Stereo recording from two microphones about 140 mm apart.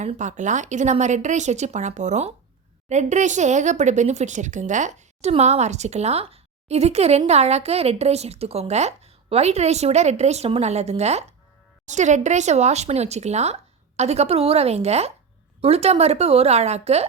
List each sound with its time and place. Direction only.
0.0 s speech: 60° right (ahead or behind)